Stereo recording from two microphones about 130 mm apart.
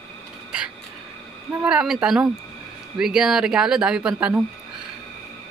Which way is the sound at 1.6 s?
5° right (ahead or behind).